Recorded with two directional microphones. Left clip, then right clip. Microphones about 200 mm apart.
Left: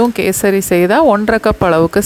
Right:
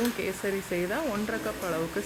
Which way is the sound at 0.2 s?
50° left (ahead or behind).